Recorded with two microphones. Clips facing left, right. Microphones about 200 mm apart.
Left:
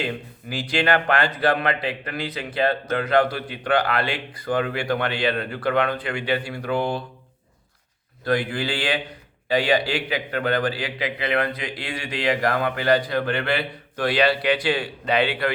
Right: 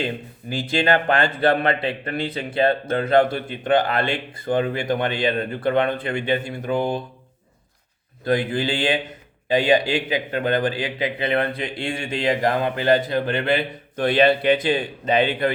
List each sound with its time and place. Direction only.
0.7 s a man's voice: 20° right (ahead or behind)
8.2 s a man's voice: 20° right (ahead or behind)